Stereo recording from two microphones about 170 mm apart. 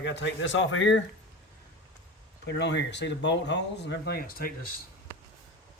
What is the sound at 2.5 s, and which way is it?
Speech, 90° left.